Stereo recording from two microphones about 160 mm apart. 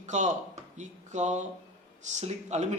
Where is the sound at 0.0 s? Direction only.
50° right (ahead or behind).